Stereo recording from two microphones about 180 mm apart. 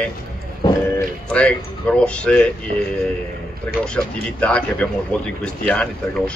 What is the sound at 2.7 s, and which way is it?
Speech, 40° right (ahead or behind).